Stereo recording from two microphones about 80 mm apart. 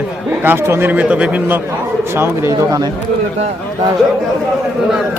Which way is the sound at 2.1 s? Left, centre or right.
Right.